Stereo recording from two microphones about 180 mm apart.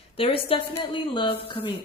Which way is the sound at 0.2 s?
30° left (ahead or behind).